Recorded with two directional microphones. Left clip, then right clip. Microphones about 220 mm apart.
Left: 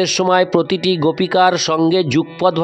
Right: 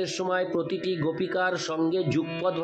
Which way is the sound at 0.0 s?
50° left (ahead or behind).